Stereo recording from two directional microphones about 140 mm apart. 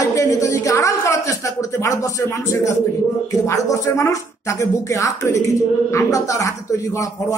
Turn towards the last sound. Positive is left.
turn(degrees=25)  # may be behind; listen again after turning